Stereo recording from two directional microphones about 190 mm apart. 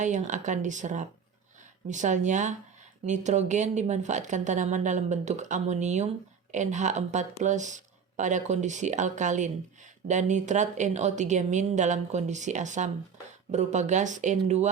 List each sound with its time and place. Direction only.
0.0 s speech: 40° right (ahead or behind)